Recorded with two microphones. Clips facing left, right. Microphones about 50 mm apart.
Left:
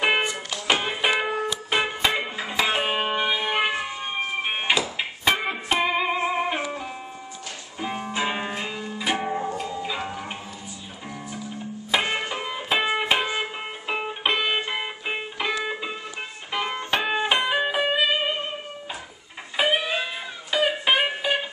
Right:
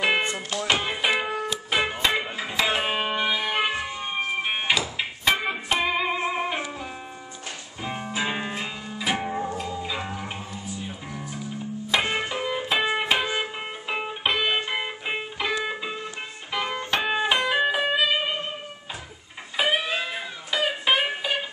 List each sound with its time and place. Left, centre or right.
0.0 s music: centre
11.9 s music: centre
19.5 s guitar: centre
20.5 s music: centre